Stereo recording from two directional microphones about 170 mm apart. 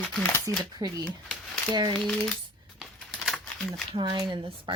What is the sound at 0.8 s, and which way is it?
Speech, 20° right (ahead or behind).